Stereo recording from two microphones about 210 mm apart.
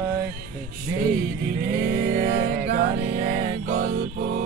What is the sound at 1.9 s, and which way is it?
Music, 40° right (ahead or behind).